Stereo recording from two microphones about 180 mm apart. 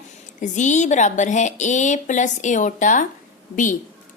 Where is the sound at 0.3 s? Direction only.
45° left (ahead or behind).